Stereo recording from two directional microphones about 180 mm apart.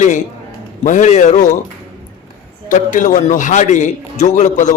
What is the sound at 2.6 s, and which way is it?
A man's voice, 45° left (ahead or behind).